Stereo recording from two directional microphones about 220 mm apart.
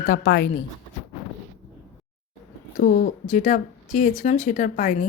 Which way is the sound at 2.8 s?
40° left (ahead or behind).